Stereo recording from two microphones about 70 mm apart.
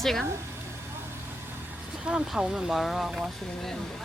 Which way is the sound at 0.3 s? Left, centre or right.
Right.